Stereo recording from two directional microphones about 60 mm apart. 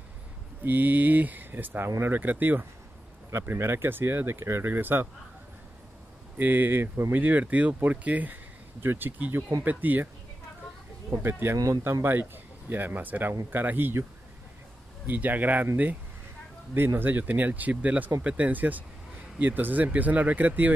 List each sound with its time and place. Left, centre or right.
0.7 s speech: right
3.3 s speech: right
6.3 s speech: right
7.1 s speech: right
11.1 s speech: right
11.5 s speech: right
11.8 s speech: right
15.0 s speech: right